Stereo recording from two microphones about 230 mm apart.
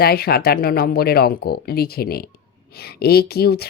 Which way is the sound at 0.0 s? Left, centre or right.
Left.